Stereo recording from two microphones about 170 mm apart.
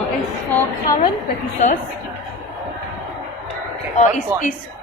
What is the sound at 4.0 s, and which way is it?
Speech, 50° left (ahead or behind).